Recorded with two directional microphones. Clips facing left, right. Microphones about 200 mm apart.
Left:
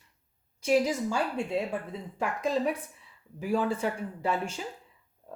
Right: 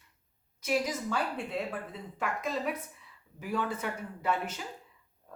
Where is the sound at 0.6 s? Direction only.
30° left (ahead or behind).